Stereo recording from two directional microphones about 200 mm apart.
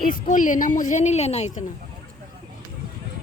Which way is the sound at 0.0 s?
40° left (ahead or behind).